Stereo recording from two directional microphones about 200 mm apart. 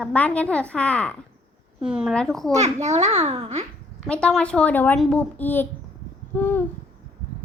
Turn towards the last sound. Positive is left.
turn(degrees=10)  # may be behind; listen again after turning